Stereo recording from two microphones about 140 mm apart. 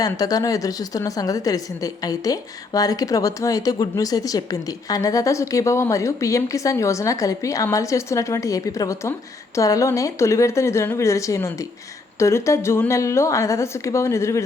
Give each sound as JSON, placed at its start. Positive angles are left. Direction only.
{"t": 0.0, "sound": "a woman's voice", "side_deg": 25}